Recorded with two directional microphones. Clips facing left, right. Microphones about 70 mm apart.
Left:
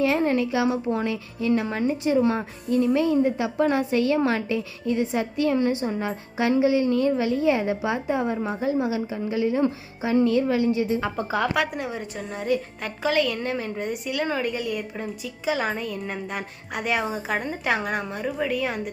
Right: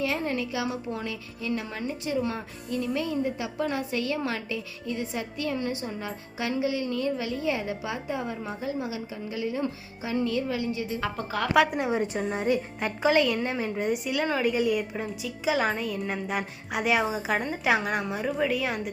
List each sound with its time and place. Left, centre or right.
0.0 s a woman's voice: left
11.0 s a woman's voice: left
11.5 s a woman's voice: centre
11.8 s a woman's voice: centre